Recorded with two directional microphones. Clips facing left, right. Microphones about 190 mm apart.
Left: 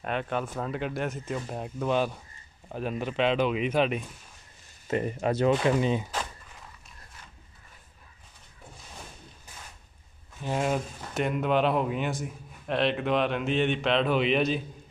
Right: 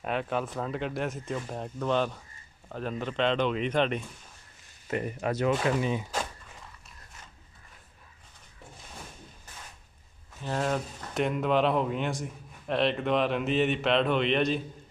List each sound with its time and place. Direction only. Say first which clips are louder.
0.0 s speech: even; centre (ahead or behind)
4.8 s speech: left 3 dB; 25° left (ahead or behind)
10.4 s speech: left 2 dB; 10° left (ahead or behind)